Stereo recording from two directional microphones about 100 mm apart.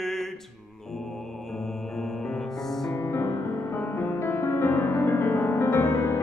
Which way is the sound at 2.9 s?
25° left (ahead or behind).